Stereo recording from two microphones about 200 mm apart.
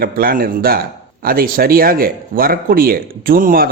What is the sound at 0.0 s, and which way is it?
A man's voice, 45° right (ahead or behind).